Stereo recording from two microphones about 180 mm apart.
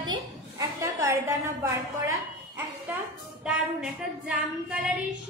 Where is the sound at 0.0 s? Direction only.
20° right (ahead or behind).